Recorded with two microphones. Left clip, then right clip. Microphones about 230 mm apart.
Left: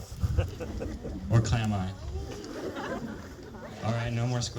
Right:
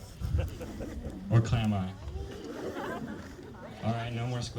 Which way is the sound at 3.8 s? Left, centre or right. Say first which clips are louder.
Left 2 dB; left.